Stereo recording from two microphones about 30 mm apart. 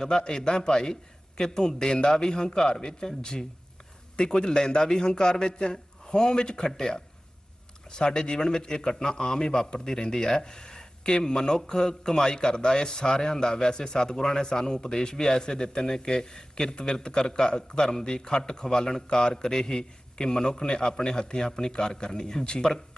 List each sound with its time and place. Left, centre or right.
0.2 s a man's voice: left